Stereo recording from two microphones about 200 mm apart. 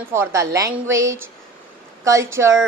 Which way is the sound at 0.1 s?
15° right (ahead or behind).